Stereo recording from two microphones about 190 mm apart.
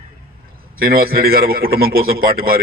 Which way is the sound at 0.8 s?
50° right (ahead or behind).